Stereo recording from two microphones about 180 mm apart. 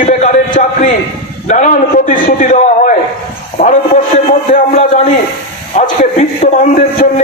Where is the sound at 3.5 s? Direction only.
40° left (ahead or behind).